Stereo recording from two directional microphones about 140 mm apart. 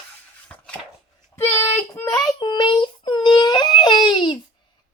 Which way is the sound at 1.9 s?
15° left (ahead or behind).